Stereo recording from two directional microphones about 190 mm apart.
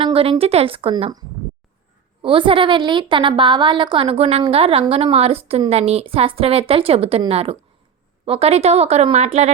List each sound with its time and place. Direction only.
0.0 s a woman's voice: 30° right (ahead or behind)